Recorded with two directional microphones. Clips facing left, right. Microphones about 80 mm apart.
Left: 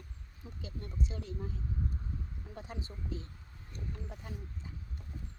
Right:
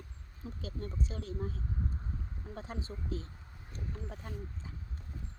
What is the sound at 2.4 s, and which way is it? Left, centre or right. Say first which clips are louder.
Speech: right 4 dB; right.